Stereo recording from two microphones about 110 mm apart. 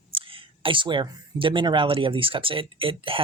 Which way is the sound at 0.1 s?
55° right (ahead or behind).